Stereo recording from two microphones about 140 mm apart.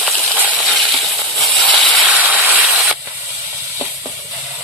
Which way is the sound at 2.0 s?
10° right (ahead or behind).